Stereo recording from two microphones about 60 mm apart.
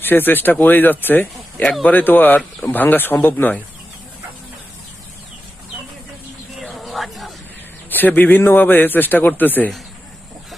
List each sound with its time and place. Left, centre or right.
0.0 s a man's voice: left
6.6 s a sound: centre
7.9 s a man's voice: left